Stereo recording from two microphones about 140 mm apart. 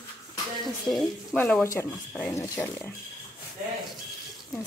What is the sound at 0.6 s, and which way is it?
Speech, centre (ahead or behind).